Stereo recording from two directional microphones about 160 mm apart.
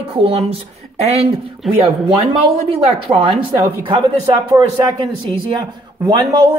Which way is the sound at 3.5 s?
30° right (ahead or behind).